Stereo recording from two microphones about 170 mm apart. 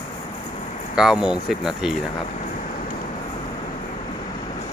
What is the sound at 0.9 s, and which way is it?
Speech, 5° right (ahead or behind).